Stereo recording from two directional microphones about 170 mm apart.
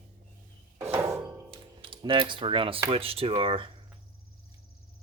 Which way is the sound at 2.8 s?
35° right (ahead or behind).